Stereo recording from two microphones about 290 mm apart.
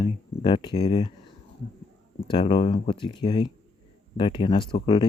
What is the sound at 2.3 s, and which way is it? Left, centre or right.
Speech, centre.